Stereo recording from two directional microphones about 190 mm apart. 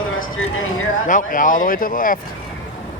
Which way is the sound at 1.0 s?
45° left (ahead or behind).